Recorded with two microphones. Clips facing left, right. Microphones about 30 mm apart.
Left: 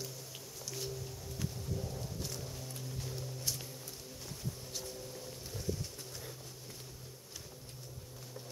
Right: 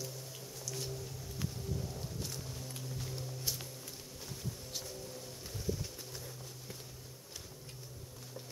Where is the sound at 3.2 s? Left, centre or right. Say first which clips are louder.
Even; centre.